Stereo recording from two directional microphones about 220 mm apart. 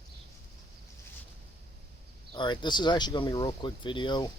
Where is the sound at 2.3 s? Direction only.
20° left (ahead or behind).